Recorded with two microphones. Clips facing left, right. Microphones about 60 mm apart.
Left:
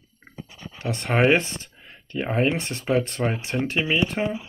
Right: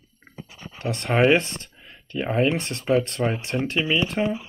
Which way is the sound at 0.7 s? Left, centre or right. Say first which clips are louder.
Right 1 dB; right.